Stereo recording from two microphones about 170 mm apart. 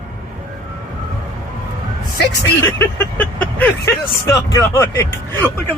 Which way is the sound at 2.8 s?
10° left (ahead or behind).